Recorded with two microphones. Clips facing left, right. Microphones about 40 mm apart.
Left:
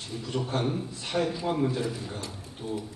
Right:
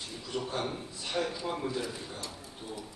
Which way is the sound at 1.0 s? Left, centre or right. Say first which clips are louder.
Left 4 dB; left.